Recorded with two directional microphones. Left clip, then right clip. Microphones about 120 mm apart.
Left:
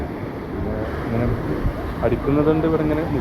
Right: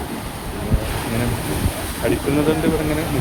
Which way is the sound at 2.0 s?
35° right (ahead or behind).